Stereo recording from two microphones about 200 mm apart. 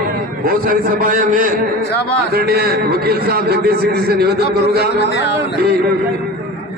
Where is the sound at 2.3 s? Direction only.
50° right (ahead or behind).